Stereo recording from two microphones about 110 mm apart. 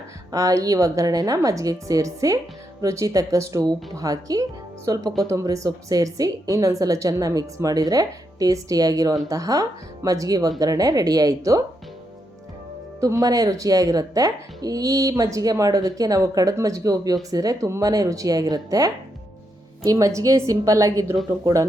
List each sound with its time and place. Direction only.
0.3 s speech: 30° right (ahead or behind)
13.0 s speech: 30° right (ahead or behind)